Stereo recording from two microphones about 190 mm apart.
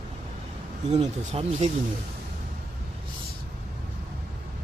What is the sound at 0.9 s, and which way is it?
Speech, 35° right (ahead or behind).